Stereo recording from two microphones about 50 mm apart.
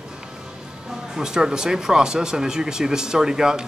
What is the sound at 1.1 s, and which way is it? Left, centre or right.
Speech, centre.